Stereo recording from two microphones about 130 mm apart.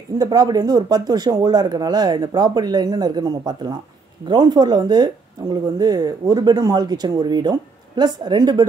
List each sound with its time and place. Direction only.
0.2 s speech: 30° right (ahead or behind)